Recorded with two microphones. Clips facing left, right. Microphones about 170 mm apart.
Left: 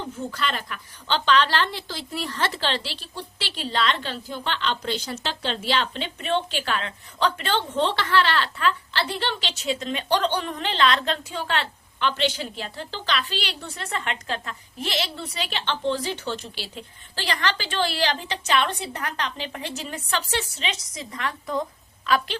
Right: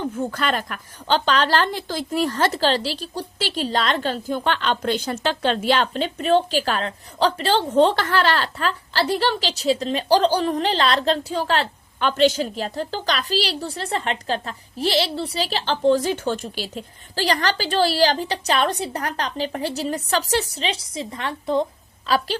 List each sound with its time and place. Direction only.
0.2 s a woman's voice: 50° right (ahead or behind); by 22.4 s 35° right (ahead or behind)